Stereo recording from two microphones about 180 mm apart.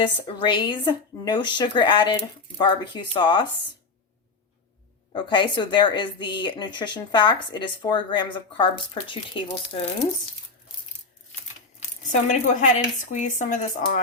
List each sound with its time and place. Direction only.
0.0 s a woman's voice: 25° left (ahead or behind)
5.1 s a woman's voice: 25° left (ahead or behind)
12.0 s speech: 40° left (ahead or behind)